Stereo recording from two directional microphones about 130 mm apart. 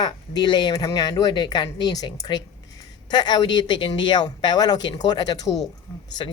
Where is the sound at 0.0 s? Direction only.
35° left (ahead or behind).